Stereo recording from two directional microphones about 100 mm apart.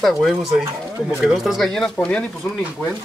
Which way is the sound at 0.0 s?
Centre (ahead or behind).